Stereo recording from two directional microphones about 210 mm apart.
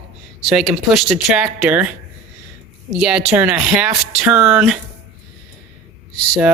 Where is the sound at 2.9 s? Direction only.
Centre (ahead or behind).